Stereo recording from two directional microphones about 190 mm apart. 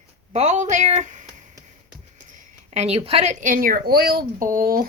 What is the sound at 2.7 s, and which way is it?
Speech, 35° right (ahead or behind).